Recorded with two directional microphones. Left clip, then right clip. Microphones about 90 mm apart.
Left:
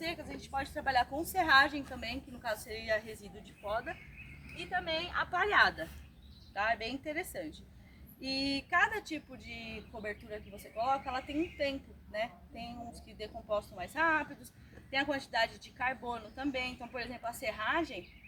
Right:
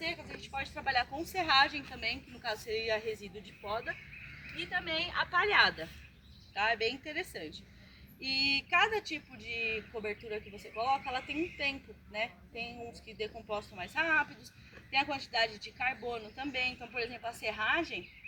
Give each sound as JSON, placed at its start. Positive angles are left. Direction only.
{"t": 0.0, "sound": "a woman's voice", "side_deg": 30}
{"t": 4.7, "sound": "a woman's voice", "side_deg": 0}